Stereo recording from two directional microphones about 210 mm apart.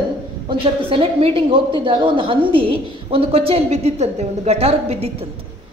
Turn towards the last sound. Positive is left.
turn(degrees=-30)  # may be behind; listen again after turning